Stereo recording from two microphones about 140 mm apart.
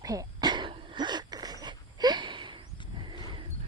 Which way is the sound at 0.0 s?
25° right (ahead or behind).